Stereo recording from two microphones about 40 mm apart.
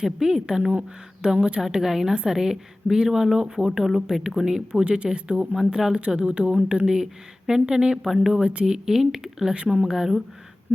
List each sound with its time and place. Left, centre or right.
0.0 s a woman's voice: centre
0.6 s speech: right
1.2 s speech: right
1.8 s a woman's voice: centre
8.7 s a woman's voice: centre